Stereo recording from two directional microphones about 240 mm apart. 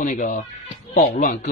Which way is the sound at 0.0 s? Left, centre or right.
Left.